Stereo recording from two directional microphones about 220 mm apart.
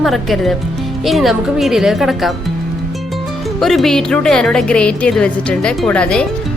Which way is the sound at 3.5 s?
Centre (ahead or behind).